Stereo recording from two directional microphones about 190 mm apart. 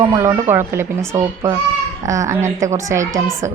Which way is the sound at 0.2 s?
15° right (ahead or behind).